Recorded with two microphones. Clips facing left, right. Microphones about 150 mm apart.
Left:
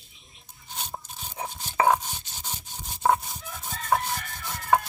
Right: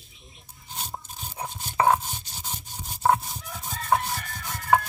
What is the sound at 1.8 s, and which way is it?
Rub, centre (ahead or behind).